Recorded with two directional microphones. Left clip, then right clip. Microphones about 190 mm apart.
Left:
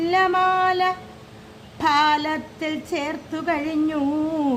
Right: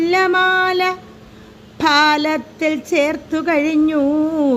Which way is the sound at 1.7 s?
20° right (ahead or behind).